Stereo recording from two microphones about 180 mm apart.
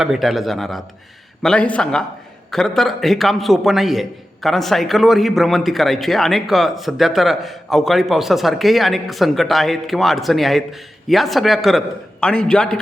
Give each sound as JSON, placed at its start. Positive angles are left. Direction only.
{"t": 0.0, "sound": "a man's voice", "side_deg": 0}